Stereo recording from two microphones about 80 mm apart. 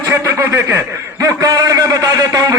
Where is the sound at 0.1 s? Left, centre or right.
Right.